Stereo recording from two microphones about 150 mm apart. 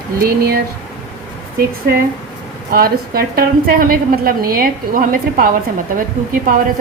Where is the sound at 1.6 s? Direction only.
85° right; by 5.5 s 65° right (ahead or behind).